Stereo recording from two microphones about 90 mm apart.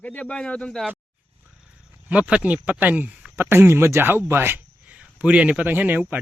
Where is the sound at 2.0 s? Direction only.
10° right (ahead or behind).